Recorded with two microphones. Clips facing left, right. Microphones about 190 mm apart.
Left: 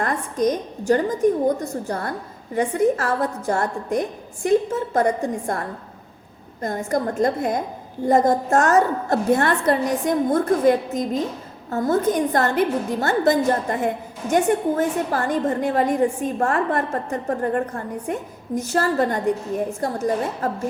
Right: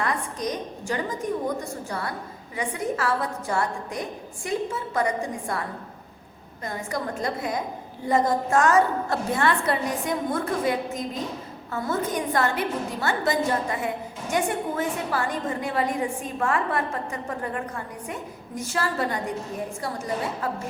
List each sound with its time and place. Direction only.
0.0 s a woman's voice: 50° left (ahead or behind)